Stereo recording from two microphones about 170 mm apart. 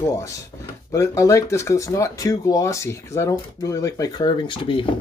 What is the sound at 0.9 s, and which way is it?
Speech, 15° left (ahead or behind).